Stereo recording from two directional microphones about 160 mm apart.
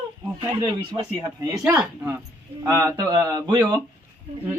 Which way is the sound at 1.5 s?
5° right (ahead or behind).